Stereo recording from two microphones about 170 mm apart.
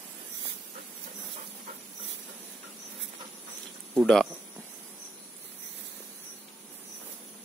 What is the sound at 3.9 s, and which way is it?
Speech, centre (ahead or behind).